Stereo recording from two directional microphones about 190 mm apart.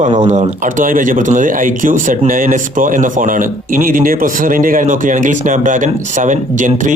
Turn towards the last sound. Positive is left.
turn(degrees=-40)  # may be behind; listen again after turning